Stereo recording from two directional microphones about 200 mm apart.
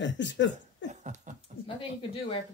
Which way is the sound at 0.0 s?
65° left (ahead or behind).